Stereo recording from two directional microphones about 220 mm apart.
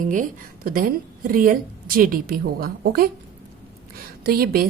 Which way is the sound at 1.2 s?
40° right (ahead or behind).